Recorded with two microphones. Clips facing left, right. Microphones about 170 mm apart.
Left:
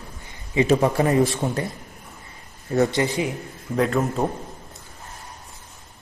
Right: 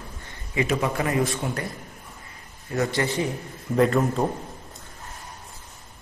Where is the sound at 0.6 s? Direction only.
30° left (ahead or behind).